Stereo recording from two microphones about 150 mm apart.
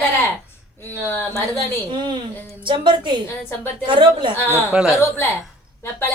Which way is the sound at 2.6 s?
30° right (ahead or behind).